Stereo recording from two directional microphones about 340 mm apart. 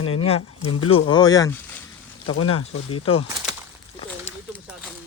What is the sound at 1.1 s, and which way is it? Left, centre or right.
Speech, centre.